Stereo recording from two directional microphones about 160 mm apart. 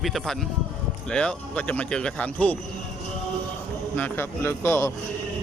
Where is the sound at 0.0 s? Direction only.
Centre (ahead or behind).